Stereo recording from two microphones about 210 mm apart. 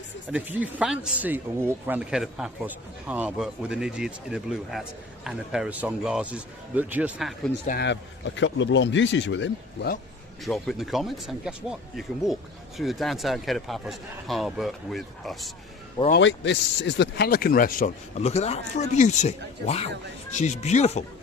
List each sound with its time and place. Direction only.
0.3 s speech: 5° right (ahead or behind)
7.7 s speech: 55° left (ahead or behind)
10.4 s speech: centre (ahead or behind)
16.2 s speech: 60° left (ahead or behind); by 21.0 s 30° left (ahead or behind)